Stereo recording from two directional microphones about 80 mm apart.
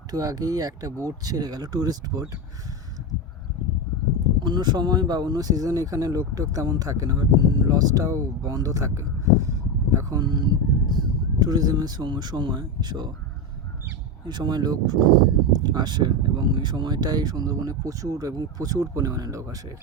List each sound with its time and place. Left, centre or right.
0.1 s speech: right
4.4 s speech: right
10.2 s speech: right
14.3 s speech: right